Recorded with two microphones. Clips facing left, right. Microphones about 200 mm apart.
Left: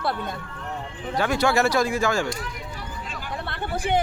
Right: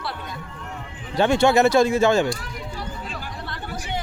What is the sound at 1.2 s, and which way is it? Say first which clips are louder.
Speech: right 5 dB; 25° right (ahead or behind).